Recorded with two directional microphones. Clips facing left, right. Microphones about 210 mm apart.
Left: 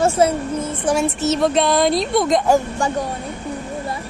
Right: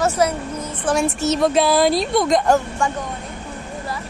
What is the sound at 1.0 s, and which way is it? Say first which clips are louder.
A woman's voice: right 2 dB; 5° left (ahead or behind).